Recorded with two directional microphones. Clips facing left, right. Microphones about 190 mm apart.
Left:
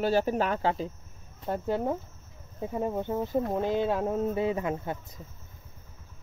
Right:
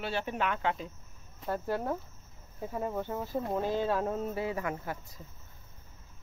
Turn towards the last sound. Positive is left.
turn(degrees=20)  # may be behind; listen again after turning